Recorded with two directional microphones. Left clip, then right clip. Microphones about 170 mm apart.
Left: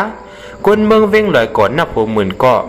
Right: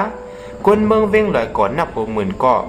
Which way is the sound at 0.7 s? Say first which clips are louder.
Left 4 dB; 30° left (ahead or behind).